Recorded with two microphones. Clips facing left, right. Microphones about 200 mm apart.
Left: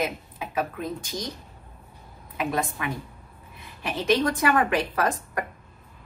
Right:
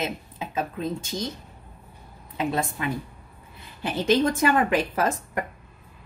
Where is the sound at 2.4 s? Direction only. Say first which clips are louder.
Right 1 dB; 25° right (ahead or behind).